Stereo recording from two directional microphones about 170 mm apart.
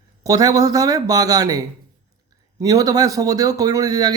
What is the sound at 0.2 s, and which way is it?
Speech, 20° right (ahead or behind).